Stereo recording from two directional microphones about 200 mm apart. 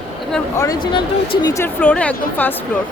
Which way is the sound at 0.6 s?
20° left (ahead or behind).